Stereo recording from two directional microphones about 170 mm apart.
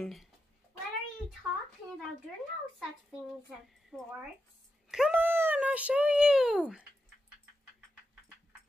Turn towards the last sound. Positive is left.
turn(degrees=-5)  # may be behind; listen again after turning